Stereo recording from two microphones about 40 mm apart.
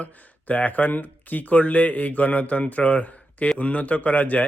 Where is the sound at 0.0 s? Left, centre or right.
Left.